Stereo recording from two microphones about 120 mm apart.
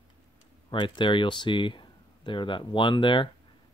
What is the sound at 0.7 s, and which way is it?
Speech, 40° left (ahead or behind).